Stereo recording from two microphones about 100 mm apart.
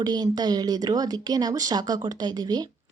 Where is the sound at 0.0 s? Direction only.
45° right (ahead or behind).